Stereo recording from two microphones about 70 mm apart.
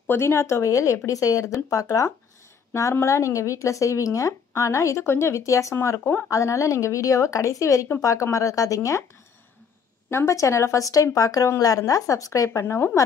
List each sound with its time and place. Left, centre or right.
0.1 s speech: left
10.0 s speech: left
12.5 s speech: left